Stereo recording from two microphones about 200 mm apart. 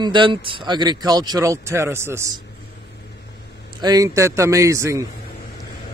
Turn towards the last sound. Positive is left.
turn(degrees=-15)  # may be behind; listen again after turning